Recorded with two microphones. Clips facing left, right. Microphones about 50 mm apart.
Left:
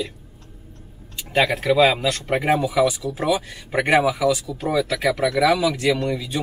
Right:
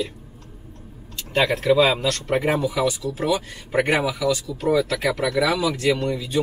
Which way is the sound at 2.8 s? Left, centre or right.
Centre.